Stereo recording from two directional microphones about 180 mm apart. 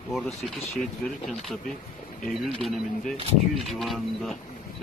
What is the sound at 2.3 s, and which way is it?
Speech, centre (ahead or behind).